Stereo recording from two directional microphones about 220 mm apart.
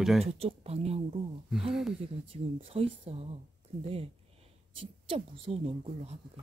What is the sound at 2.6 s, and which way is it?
Speech, 25° right (ahead or behind).